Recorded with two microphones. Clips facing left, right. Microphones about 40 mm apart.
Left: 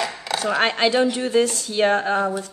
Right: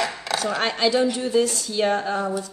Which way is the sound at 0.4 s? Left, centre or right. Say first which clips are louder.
Left 4 dB; left.